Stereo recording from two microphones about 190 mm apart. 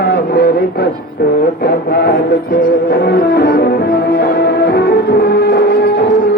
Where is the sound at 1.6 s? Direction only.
55° left (ahead or behind).